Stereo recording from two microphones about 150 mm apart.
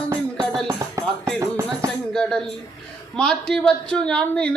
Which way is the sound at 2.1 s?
5° left (ahead or behind).